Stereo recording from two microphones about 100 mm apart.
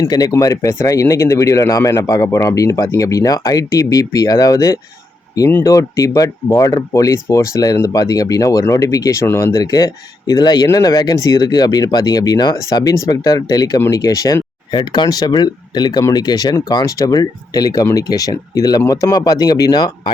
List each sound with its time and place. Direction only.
0.0 s speech: 40° left (ahead or behind)
14.7 s speech: 50° left (ahead or behind)